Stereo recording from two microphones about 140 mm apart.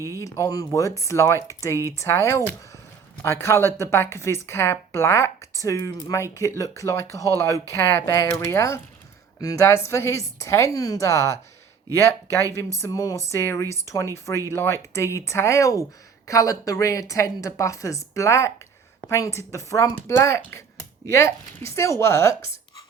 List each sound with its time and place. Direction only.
0.2 s a man's voice: 20° left (ahead or behind)
12.8 s speech: 25° left (ahead or behind)